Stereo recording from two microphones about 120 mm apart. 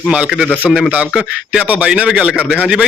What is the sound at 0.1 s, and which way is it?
A man's voice, 10° right (ahead or behind).